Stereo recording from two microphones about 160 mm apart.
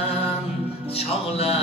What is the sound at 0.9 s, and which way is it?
Music, 40° left (ahead or behind).